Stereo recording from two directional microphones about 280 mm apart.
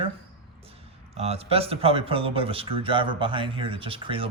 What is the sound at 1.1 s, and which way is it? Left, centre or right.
Speech, right.